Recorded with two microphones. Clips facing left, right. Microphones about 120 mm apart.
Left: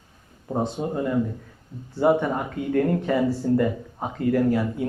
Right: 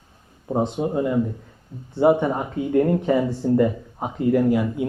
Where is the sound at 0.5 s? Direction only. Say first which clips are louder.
Right 4 dB; 15° right (ahead or behind).